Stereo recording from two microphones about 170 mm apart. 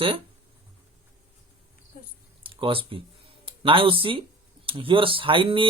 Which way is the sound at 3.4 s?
30° right (ahead or behind).